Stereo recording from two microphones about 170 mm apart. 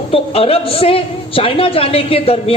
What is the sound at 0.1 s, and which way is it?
A man's voice, 35° left (ahead or behind).